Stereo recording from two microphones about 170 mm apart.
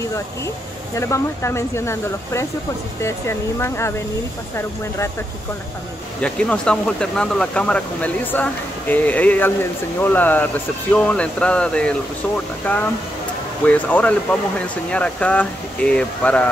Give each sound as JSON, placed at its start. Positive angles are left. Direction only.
{"t": 0.9, "sound": "speech", "side_deg": 15}
{"t": 6.2, "sound": "speech", "side_deg": 5}